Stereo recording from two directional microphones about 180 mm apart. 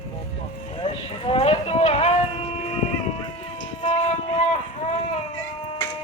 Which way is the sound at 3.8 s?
35° left (ahead or behind).